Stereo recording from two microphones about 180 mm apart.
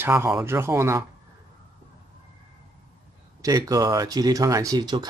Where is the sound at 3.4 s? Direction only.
20° right (ahead or behind).